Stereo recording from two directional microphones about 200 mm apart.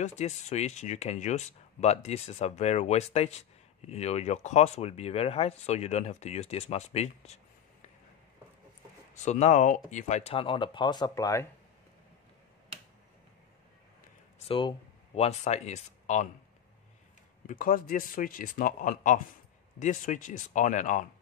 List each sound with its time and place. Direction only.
0.0 s speech: 35° left (ahead or behind)
9.2 s speech: 35° left (ahead or behind); by 11.4 s 15° left (ahead or behind)
14.4 s speech: 25° left (ahead or behind)
17.5 s speech: 45° left (ahead or behind)